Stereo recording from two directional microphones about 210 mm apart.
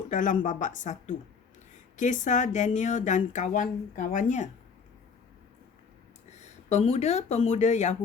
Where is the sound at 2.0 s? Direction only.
35° left (ahead or behind).